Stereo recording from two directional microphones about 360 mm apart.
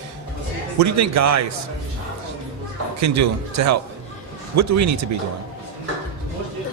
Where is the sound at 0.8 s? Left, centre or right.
Right.